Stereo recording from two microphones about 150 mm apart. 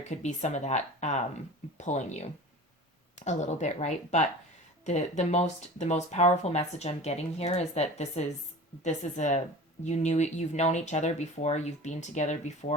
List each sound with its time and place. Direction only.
0.1 s speech: 50° left (ahead or behind)